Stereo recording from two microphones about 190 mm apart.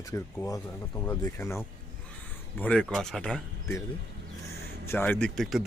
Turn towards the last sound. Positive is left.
turn(degrees=0)  # may be behind; listen again after turning